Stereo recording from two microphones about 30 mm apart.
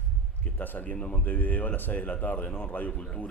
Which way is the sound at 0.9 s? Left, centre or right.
Left.